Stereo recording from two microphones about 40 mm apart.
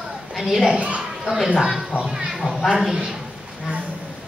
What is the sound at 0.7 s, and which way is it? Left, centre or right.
Speech, right.